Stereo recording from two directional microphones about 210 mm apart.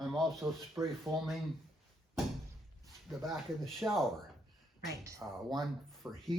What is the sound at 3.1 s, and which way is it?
Speech, centre (ahead or behind).